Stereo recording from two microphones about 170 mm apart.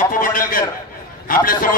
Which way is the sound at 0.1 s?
55° left (ahead or behind).